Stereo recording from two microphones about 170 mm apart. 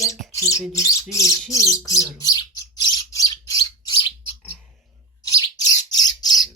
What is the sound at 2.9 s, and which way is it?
Bird, 20° left (ahead or behind).